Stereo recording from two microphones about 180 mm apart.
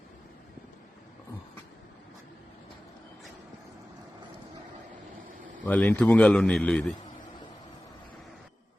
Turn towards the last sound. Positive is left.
turn(degrees=5)  # may be behind; listen again after turning